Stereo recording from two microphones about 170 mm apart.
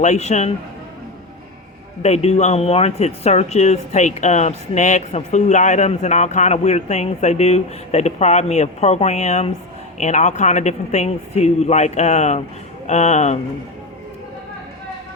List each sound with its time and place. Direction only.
0.0 s speech: 40° left (ahead or behind)
2.0 s a man's voice: 40° left (ahead or behind)